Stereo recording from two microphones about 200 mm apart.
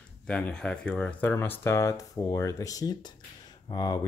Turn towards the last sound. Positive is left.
turn(degrees=20)  # may be behind; listen again after turning